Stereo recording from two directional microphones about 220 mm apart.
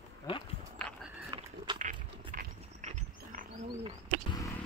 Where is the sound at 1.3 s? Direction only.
20° right (ahead or behind).